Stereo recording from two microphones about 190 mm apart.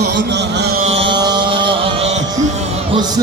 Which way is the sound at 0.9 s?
25° right (ahead or behind).